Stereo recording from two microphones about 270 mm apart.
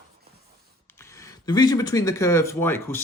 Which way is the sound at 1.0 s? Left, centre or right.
Centre.